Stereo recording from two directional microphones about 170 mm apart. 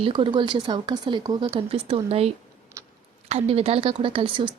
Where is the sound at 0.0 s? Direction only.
30° right (ahead or behind).